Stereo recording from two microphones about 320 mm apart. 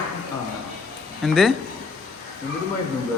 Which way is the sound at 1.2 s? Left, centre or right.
Centre.